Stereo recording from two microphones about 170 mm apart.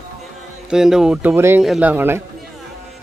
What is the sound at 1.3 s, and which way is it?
Speech, 15° right (ahead or behind).